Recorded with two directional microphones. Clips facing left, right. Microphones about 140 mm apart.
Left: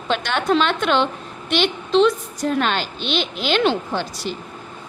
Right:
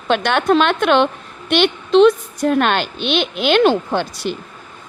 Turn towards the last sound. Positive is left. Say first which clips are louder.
# right 4 dB
turn(degrees=-60)  # may be behind; listen again after turning